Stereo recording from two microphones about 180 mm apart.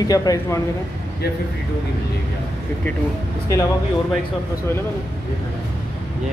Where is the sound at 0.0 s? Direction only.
20° left (ahead or behind).